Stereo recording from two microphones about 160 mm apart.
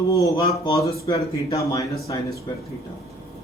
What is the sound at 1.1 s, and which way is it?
Speech, 25° left (ahead or behind).